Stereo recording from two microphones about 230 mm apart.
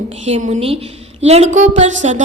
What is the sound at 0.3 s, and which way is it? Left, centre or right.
A woman's voice, right.